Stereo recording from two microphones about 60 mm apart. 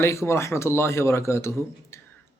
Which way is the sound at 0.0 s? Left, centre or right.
Left.